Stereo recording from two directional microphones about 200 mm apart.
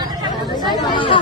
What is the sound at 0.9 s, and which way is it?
Chatter, 25° left (ahead or behind).